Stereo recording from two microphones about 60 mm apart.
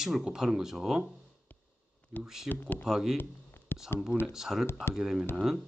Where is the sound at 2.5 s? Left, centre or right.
Left.